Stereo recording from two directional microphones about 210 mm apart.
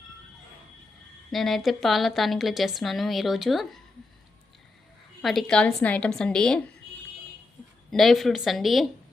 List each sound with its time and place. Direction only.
1.3 s a woman's voice: centre (ahead or behind)
5.2 s a woman's voice: centre (ahead or behind)
7.9 s a woman's voice: centre (ahead or behind)